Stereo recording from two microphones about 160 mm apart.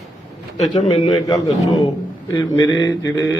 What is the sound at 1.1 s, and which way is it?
A man's voice, 25° left (ahead or behind).